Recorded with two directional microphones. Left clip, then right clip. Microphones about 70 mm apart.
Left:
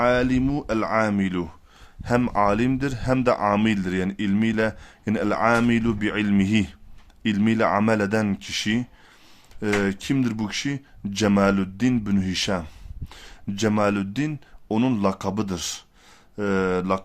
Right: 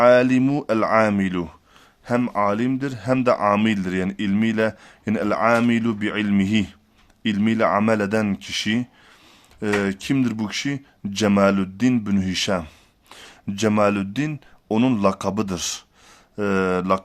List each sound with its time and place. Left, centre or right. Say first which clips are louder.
0.0 s speech: right 6 dB; right
1.3 s speech: right 2 dB; right
2.0 s speech: even; centre; by 5.1 s right
5.1 s speech: right 2 dB; centre; by 17.0 s right